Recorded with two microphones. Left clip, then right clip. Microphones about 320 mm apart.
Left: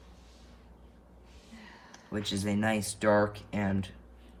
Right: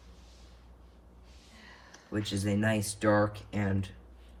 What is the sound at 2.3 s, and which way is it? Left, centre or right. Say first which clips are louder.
Speech: even; centre.